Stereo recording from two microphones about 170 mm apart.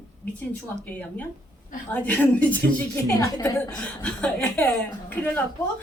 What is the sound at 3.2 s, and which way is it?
Speech, 20° left (ahead or behind).